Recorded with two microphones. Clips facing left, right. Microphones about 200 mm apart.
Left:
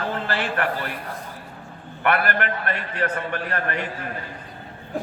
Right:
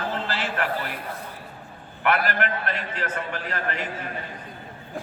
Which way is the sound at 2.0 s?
60° left (ahead or behind).